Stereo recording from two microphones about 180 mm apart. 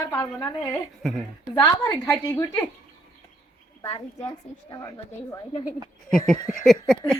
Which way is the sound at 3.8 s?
30° left (ahead or behind).